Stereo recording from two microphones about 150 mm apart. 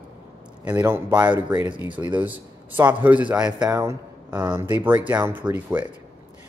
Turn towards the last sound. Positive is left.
turn(degrees=-10)  # may be behind; listen again after turning